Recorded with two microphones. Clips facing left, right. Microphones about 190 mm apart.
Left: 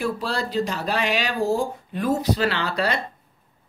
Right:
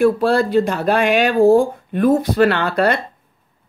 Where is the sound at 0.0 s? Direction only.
55° right (ahead or behind).